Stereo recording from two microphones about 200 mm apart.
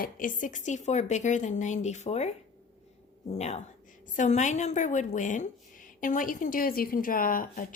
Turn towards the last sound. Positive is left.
turn(degrees=45)  # may be behind; listen again after turning